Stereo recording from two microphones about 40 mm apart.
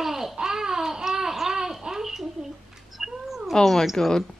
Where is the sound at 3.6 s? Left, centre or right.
Centre.